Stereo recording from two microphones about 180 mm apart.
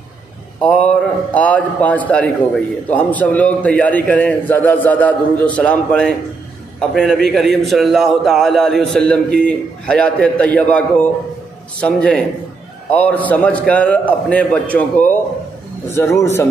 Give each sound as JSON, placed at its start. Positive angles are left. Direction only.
{"t": 0.7, "sound": "a man's voice", "side_deg": 5}